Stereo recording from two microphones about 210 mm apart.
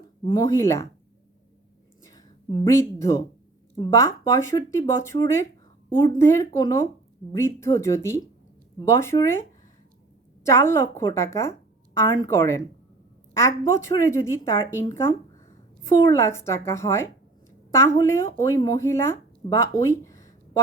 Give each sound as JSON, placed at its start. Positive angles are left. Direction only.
{"t": 0.3, "sound": "speech", "side_deg": 15}
{"t": 2.0, "sound": "speech", "side_deg": 20}